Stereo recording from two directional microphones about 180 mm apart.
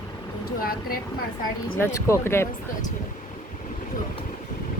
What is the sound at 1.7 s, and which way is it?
Speech, 15° left (ahead or behind).